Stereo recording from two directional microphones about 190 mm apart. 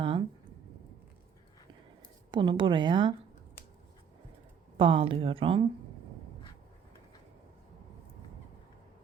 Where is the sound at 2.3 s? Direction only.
25° right (ahead or behind).